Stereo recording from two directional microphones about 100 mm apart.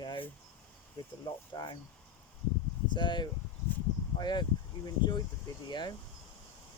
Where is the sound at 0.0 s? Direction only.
50° left (ahead or behind).